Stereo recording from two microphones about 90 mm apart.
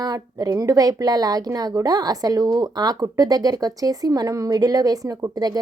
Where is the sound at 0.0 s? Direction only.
45° right (ahead or behind).